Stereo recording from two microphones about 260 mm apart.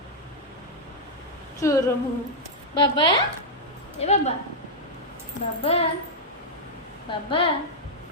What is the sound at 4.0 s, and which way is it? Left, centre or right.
Speech, left.